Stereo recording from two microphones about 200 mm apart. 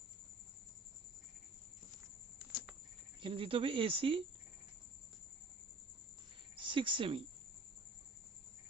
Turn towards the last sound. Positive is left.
turn(degrees=-25)  # may be behind; listen again after turning